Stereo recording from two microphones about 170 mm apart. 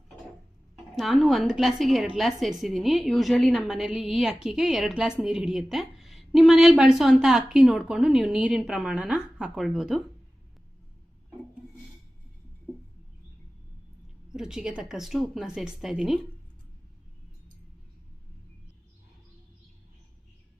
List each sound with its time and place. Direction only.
0.9 s a woman's voice: centre (ahead or behind)
14.3 s a woman's voice: 5° right (ahead or behind)